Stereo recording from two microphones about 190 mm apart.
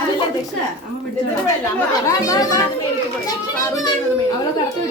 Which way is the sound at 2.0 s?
20° left (ahead or behind).